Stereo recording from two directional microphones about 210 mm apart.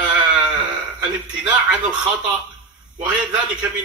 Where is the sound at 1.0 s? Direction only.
5° right (ahead or behind).